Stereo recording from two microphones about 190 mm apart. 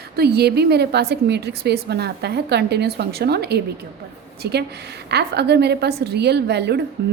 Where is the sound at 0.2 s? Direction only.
55° right (ahead or behind).